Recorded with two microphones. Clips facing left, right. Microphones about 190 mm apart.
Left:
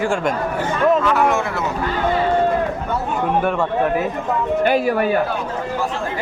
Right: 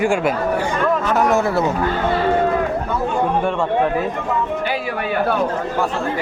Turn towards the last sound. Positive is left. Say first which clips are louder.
# left 6 dB
turn(degrees=45)  # may be behind; listen again after turning